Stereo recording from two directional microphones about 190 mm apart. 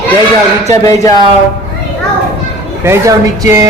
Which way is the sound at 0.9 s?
15° left (ahead or behind).